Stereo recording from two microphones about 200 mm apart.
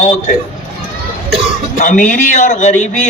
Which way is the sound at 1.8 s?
40° left (ahead or behind).